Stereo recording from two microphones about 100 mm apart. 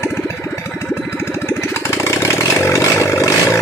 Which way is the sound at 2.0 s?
30° left (ahead or behind).